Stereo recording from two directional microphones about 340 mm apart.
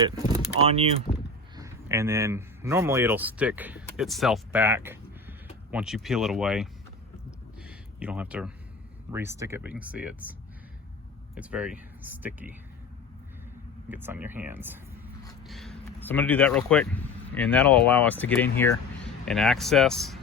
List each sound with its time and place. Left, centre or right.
0.0 s speech: centre
7.3 s a sound: centre
9.1 s speech: centre
11.3 s speech: centre
13.9 s speech: centre